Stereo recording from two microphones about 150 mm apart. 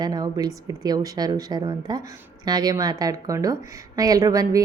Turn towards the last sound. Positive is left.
turn(degrees=-25)  # may be behind; listen again after turning